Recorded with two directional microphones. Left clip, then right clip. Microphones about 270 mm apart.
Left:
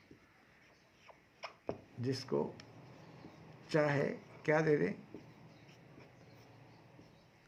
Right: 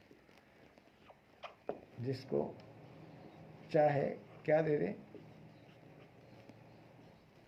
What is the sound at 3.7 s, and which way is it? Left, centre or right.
Speech, left.